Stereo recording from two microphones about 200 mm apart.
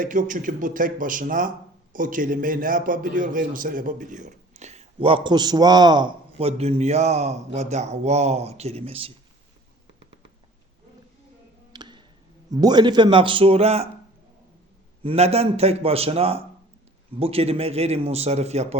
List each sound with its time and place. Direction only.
0.0 s speech: 40° right (ahead or behind)
11.7 s tick: 20° right (ahead or behind)
12.5 s speech: 20° right (ahead or behind)
15.0 s speech: 30° right (ahead or behind)